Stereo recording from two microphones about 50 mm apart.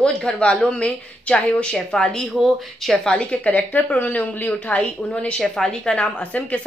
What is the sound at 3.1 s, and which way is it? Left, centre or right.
A woman's voice, left.